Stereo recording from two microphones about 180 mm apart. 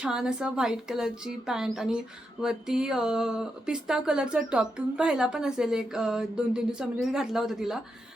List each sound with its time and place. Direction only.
0.0 s speech: 5° right (ahead or behind)